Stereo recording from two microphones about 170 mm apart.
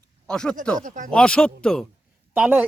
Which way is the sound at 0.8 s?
50° right (ahead or behind).